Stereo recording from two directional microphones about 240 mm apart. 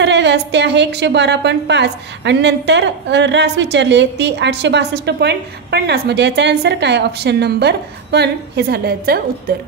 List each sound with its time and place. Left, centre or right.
0.0 s a woman's voice: right